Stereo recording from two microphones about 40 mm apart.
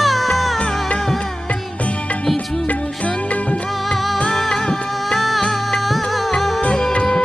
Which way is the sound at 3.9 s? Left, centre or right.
Centre.